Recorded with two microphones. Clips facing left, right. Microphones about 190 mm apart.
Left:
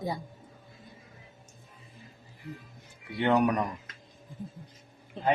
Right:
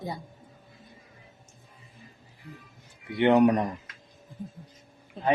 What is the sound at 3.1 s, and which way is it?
Speech, 20° right (ahead or behind).